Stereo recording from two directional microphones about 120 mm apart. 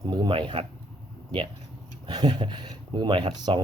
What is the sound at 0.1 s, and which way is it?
Speech, 40° right (ahead or behind).